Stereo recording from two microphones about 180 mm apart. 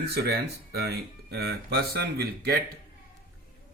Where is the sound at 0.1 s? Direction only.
65° right (ahead or behind).